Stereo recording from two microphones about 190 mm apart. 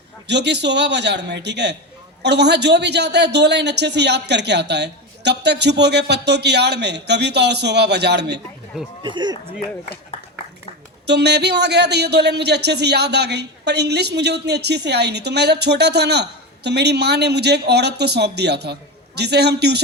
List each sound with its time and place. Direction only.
0.3 s a woman's voice: 65° right (ahead or behind)
9.0 s speech: 25° right (ahead or behind)
11.0 s a woman's voice: 60° right (ahead or behind)